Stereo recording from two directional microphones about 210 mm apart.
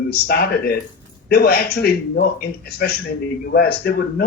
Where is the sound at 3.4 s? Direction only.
50° left (ahead or behind).